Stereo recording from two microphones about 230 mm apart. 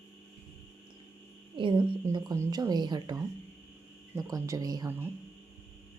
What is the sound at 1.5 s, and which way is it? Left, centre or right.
A woman's voice, right.